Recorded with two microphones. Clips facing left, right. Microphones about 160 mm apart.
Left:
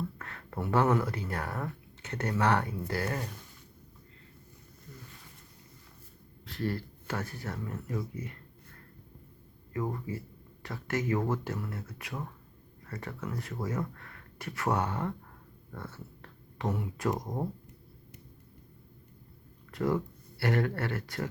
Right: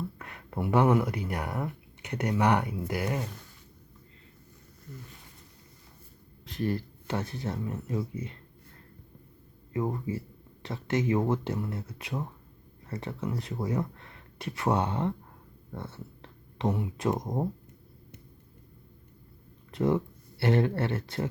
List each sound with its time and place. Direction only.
0.2 s speech: 15° right (ahead or behind)
6.4 s speech: 20° right (ahead or behind)
9.7 s speech: 20° right (ahead or behind)
19.7 s speech: 25° right (ahead or behind)